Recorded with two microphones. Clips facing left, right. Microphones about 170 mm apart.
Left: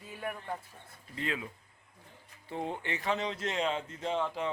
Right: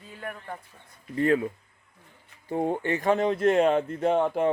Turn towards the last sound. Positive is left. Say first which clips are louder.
# right 10 dB
turn(degrees=-55)  # may be behind; listen again after turning